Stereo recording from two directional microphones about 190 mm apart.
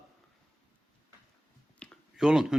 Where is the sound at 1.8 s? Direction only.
Centre (ahead or behind).